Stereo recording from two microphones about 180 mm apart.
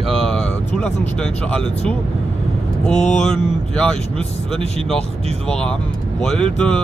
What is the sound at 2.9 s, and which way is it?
Mantra, 40° left (ahead or behind).